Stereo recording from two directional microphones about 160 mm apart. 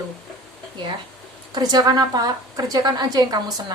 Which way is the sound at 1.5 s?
25° right (ahead or behind).